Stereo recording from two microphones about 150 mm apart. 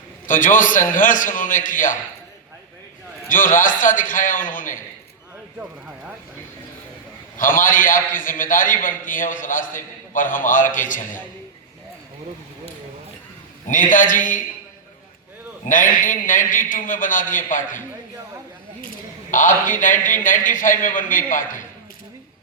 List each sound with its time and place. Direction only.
0.3 s a man's voice: 60° left (ahead or behind)
3.2 s a man's voice: 60° left (ahead or behind)
7.3 s a man's voice: 65° left (ahead or behind)
13.7 s a man's voice: 60° left (ahead or behind)
15.7 s a man's voice: 60° left (ahead or behind)
19.3 s a man's voice: 60° left (ahead or behind)